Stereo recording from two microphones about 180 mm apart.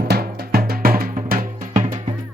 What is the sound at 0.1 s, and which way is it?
Music, 60° right (ahead or behind).